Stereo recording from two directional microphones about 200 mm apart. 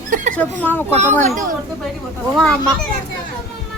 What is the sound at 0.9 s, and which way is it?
Speech, 35° right (ahead or behind).